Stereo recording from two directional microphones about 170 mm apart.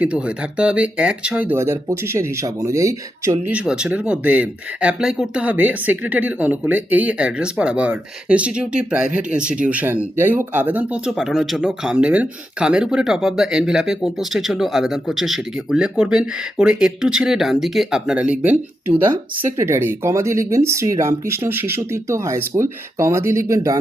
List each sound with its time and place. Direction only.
0.0 s speech: 5° right (ahead or behind)
3.5 s speech: 5° right (ahead or behind)